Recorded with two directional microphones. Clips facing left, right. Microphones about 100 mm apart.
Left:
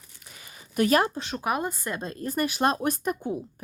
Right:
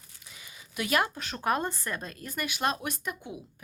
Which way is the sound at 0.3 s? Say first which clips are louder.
Left 2 dB; 50° left (ahead or behind).